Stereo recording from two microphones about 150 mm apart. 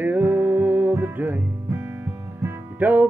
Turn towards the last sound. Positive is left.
turn(degrees=-10)  # may be behind; listen again after turning